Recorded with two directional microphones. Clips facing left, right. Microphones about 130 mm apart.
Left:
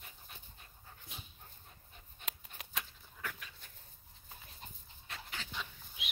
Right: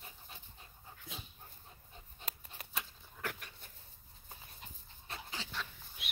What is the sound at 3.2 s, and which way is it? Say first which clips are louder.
Dog: right 3 dB; 60° right (ahead or behind).